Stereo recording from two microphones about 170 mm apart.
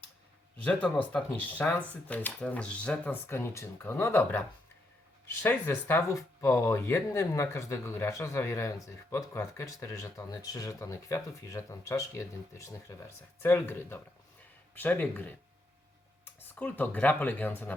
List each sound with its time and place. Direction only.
0.6 s speech: 10° left (ahead or behind)
16.6 s speech: 10° left (ahead or behind)